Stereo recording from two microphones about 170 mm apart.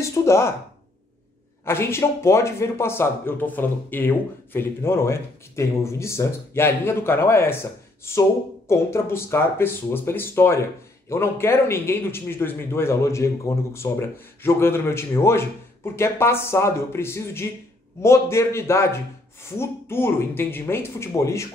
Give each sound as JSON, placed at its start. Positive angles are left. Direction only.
{"t": 0.0, "sound": "a man's voice", "side_deg": 15}
{"t": 1.6, "sound": "a man's voice", "side_deg": 15}